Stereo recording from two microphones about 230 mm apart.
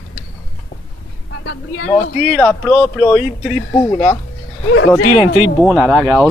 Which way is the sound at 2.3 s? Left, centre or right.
Centre.